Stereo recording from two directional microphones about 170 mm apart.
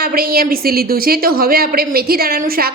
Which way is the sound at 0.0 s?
60° right (ahead or behind).